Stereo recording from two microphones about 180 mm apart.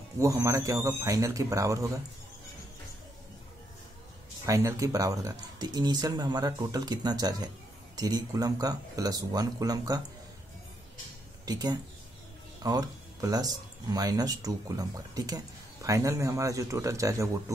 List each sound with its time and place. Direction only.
0.2 s speech: 15° right (ahead or behind)
4.5 s speech: 15° right (ahead or behind)
11.4 s speech: 20° right (ahead or behind)